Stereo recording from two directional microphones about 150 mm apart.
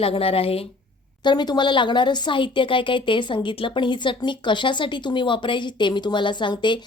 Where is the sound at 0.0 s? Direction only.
40° left (ahead or behind).